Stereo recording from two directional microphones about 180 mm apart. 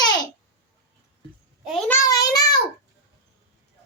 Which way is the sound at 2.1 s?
20° left (ahead or behind).